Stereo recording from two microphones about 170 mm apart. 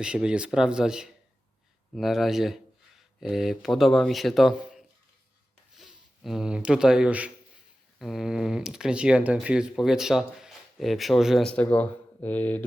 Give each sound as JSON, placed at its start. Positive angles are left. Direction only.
{"t": 0.0, "sound": "speech", "side_deg": -5}